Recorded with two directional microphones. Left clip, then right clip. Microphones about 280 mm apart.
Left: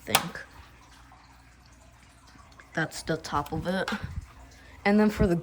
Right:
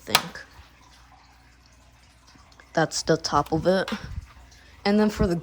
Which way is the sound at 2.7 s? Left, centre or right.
Centre.